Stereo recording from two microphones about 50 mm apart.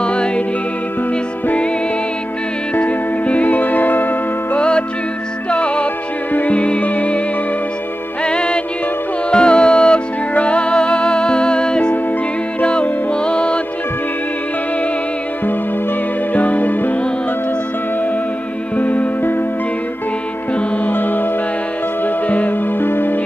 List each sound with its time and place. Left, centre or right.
0.0 s music: left
2.7 s music: left
4.6 s music: left
8.2 s music: centre
16.3 s music: left
18.8 s music: left
20.8 s music: left